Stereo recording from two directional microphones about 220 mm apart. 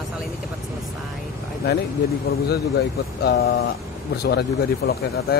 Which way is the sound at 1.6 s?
45° left (ahead or behind).